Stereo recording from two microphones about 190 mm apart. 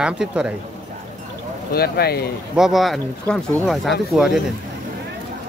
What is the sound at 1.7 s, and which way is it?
Speech, 55° left (ahead or behind).